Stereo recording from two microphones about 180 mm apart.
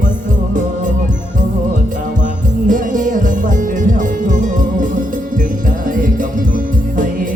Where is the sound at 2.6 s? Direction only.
45° right (ahead or behind).